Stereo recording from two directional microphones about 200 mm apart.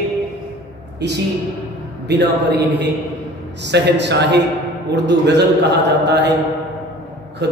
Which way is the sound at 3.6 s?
60° right (ahead or behind).